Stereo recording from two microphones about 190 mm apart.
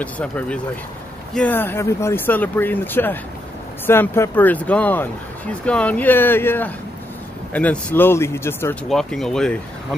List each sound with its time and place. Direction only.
0.0 s speech: 5° left (ahead or behind)
8.8 s speech: centre (ahead or behind)